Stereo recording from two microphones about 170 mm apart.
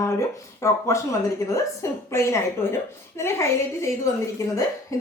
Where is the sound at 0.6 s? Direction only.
15° left (ahead or behind).